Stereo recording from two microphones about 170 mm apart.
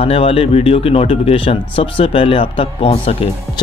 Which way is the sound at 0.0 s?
35° left (ahead or behind).